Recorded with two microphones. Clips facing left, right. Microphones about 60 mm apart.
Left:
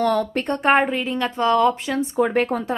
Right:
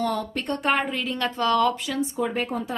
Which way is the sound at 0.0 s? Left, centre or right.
Left.